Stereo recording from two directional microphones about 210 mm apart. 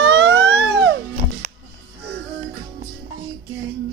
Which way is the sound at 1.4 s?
35° right (ahead or behind).